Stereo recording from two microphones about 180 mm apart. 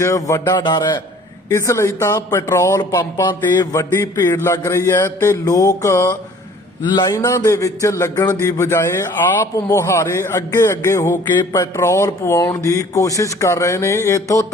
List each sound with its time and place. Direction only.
0.0 s a man's voice: 15° left (ahead or behind)